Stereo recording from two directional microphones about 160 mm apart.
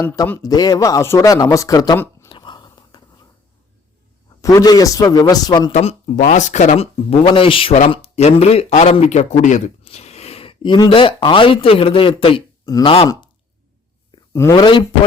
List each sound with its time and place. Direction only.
0.0 s speech: 20° left (ahead or behind)
2.3 s biting: 30° left (ahead or behind)
4.4 s speech: 20° left (ahead or behind)
5.7 s speech: 40° left (ahead or behind)
14.3 s speech: 15° left (ahead or behind)